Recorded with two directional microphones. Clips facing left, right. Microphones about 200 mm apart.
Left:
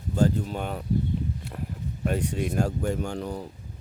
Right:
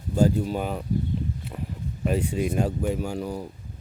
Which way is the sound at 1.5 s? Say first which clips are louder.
Right 2 dB; 5° right (ahead or behind).